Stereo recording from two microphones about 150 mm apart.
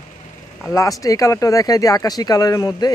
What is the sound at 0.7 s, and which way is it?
Speech, 20° left (ahead or behind).